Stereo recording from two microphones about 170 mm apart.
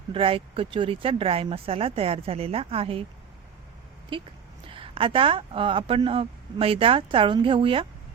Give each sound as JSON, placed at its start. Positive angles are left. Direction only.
{"t": 0.1, "sound": "speech", "side_deg": -30}
{"t": 4.1, "sound": "speech", "side_deg": -30}